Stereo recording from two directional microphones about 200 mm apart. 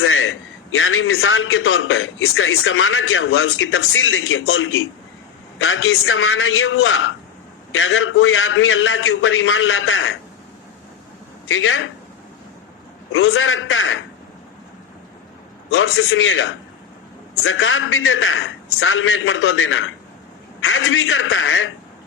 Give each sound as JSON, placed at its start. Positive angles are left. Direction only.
{"t": 0.0, "sound": "a man's voice", "side_deg": 90}
{"t": 11.4, "sound": "speech", "side_deg": 80}
{"t": 13.1, "sound": "a man's voice", "side_deg": 90}
{"t": 15.7, "sound": "a man's voice", "side_deg": 85}